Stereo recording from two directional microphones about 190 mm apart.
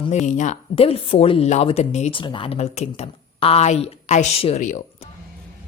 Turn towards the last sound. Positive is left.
turn(degrees=40)  # may be behind; listen again after turning